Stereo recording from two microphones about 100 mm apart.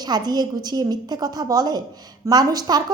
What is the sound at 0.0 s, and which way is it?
A woman's voice, 45° right (ahead or behind).